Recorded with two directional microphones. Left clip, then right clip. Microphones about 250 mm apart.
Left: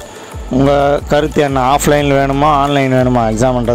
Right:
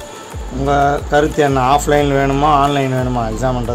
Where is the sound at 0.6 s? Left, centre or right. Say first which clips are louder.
Left 3 dB; left.